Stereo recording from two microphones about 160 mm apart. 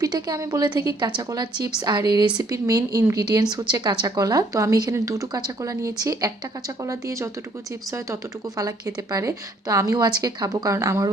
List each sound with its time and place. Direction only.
0.0 s a woman's voice: 25° right (ahead or behind)